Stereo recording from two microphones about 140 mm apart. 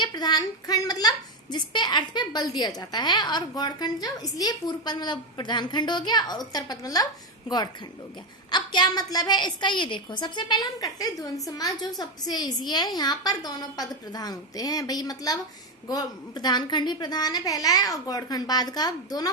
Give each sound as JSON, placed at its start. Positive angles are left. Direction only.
{"t": 0.0, "sound": "a woman's voice", "side_deg": 30}